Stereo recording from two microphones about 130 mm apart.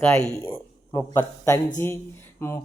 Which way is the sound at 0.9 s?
30° left (ahead or behind).